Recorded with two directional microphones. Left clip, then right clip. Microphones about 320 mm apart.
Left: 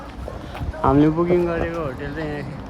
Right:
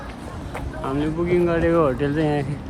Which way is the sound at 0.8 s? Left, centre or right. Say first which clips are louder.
Left 9 dB; left.